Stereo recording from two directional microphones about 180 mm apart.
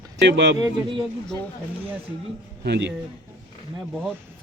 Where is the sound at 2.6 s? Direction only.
70° right (ahead or behind).